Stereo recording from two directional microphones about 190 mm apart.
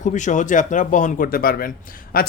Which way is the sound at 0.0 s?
40° left (ahead or behind).